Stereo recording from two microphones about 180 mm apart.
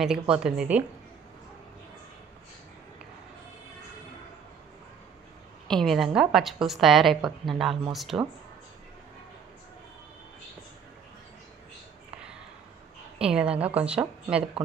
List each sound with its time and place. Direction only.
0.0 s a woman's voice: 5° right (ahead or behind)
5.7 s a woman's voice: centre (ahead or behind)
13.2 s a woman's voice: 5° right (ahead or behind)